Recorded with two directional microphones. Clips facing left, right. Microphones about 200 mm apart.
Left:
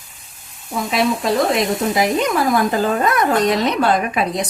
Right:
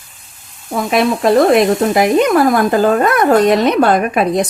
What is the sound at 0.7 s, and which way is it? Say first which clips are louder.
Sizzle: right 4 dB; 60° right (ahead or behind).